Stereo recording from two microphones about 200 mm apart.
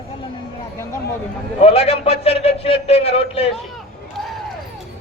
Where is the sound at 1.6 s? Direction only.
30° left (ahead or behind).